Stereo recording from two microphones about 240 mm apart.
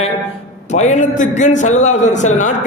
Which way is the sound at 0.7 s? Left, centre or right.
Left.